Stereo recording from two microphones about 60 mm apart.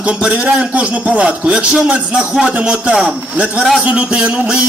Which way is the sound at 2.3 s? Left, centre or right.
Centre.